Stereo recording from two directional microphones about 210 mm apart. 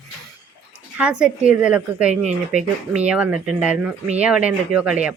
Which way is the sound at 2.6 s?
30° right (ahead or behind).